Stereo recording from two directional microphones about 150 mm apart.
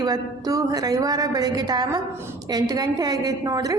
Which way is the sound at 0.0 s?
25° right (ahead or behind).